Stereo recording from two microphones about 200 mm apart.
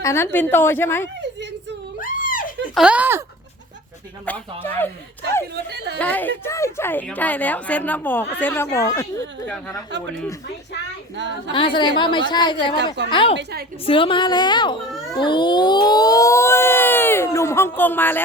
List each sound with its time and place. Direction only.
0.0 s speech: 15° left (ahead or behind)
2.0 s a sound: 45° left (ahead or behind)
2.7 s speech: 5° right (ahead or behind)
4.3 s speech: 10° left (ahead or behind)
5.7 s speech: 55° right (ahead or behind)
6.0 s speech: 10° left (ahead or behind)
11.5 s a woman's voice: 25° left (ahead or behind)
13.3 s a woman's voice: 55° right (ahead or behind)
13.8 s a woman's voice: 25° left (ahead or behind); by 18.2 s 10° left (ahead or behind)